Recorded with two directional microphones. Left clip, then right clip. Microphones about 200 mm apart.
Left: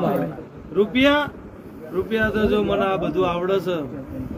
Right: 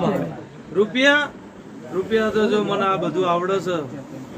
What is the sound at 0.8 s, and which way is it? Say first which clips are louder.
A man's voice: right 1 dB; 5° right (ahead or behind).